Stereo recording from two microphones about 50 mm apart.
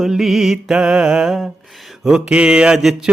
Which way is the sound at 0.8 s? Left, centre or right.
Centre.